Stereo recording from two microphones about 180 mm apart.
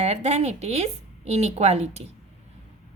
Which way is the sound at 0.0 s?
40° right (ahead or behind).